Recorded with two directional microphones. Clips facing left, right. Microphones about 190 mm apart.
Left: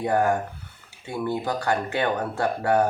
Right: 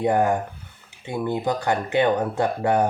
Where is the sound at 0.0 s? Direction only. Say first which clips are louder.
Right 2 dB; 20° right (ahead or behind).